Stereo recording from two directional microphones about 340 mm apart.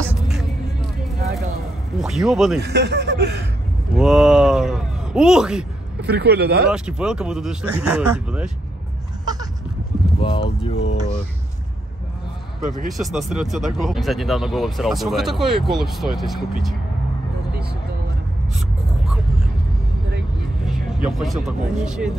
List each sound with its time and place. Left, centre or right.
2.0 s speech: centre
2.6 s speech: right
3.9 s speech: centre
5.9 s speech: right
6.7 s speech: centre
9.2 s goat: centre
10.2 s speech: centre
12.6 s speech: right
12.9 s speech: centre
20.6 s speech: centre